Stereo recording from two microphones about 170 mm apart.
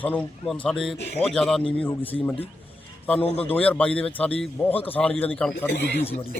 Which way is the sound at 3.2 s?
35° left (ahead or behind).